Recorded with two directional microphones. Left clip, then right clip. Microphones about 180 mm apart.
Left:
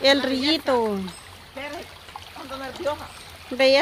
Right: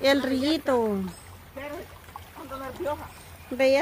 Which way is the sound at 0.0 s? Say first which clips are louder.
Left 3 dB; centre (ahead or behind).